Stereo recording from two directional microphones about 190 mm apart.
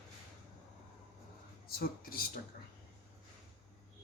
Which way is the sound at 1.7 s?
50° left (ahead or behind).